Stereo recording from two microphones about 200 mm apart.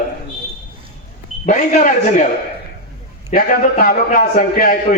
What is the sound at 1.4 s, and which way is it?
Speech, 35° left (ahead or behind).